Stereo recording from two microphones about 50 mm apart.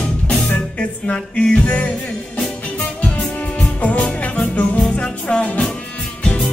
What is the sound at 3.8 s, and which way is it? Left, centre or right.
Music, left.